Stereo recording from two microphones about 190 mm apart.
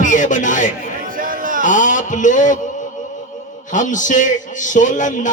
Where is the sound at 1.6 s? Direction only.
40° left (ahead or behind).